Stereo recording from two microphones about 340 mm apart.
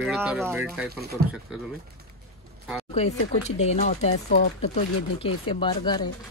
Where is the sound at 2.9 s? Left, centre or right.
Centre.